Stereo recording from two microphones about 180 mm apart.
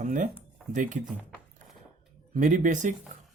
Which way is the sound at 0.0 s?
45° right (ahead or behind).